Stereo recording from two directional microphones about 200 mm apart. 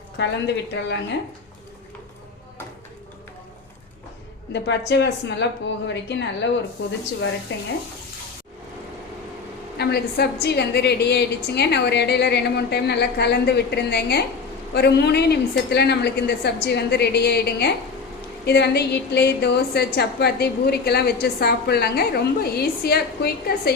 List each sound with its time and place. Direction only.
0.2 s a woman's voice: 60° left (ahead or behind)
4.5 s a woman's voice: 60° left (ahead or behind)
7.5 s a woman's voice: 65° left (ahead or behind)
9.7 s a woman's voice: 55° left (ahead or behind)